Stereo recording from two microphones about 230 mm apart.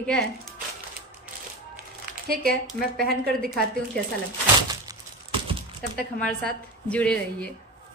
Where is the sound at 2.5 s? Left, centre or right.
Centre.